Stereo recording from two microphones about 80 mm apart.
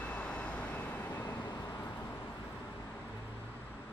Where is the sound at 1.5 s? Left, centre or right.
Left.